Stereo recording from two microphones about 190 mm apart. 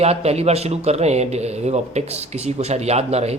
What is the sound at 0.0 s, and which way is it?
A man's voice, 35° right (ahead or behind).